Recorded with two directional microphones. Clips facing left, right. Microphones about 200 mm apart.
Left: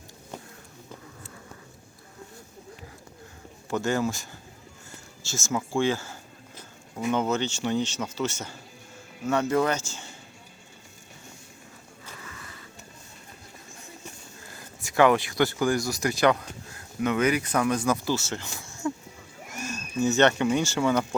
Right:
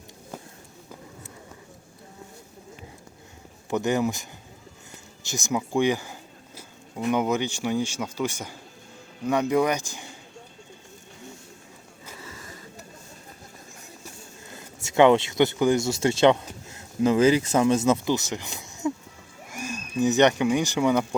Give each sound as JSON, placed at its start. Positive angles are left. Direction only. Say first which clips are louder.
{"t": 3.7, "sound": "speech", "louder": "right 2 dB", "side_deg": -20}
{"t": 12.2, "sound": "skateboard", "louder": "right 5 dB", "side_deg": -30}
{"t": 14.5, "sound": "speech", "louder": "right 3 dB", "side_deg": -25}